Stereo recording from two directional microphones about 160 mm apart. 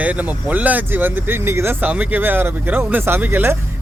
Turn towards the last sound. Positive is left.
turn(degrees=-15)  # may be behind; listen again after turning